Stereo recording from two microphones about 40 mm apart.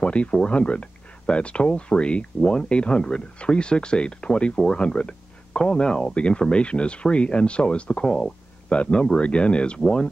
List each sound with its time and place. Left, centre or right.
0.0 s speech: left